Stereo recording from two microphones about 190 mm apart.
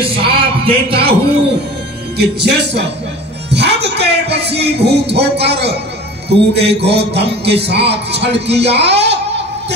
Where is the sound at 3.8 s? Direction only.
60° right (ahead or behind).